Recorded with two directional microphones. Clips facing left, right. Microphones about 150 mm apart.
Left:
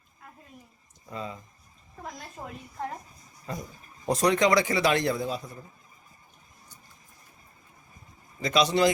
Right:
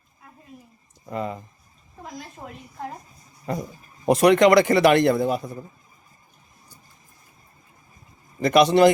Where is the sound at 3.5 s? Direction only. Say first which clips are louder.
Right 8 dB; 65° right (ahead or behind).